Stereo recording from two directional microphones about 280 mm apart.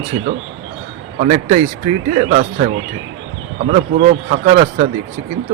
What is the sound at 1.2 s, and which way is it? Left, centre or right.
Speech, right.